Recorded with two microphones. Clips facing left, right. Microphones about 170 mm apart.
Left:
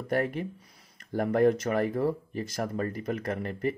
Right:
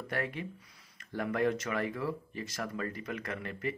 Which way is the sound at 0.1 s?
45° left (ahead or behind).